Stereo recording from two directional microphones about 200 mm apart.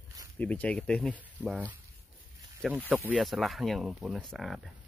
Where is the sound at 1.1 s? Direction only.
5° right (ahead or behind).